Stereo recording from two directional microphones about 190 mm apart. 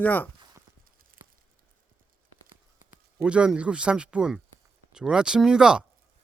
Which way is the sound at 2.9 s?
5° right (ahead or behind).